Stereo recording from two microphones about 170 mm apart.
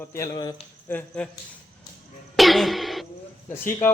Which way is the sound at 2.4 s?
Centre (ahead or behind).